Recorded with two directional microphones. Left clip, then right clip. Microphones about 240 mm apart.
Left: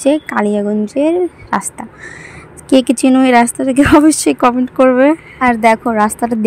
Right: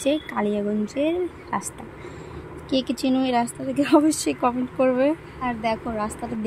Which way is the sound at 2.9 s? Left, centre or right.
Left.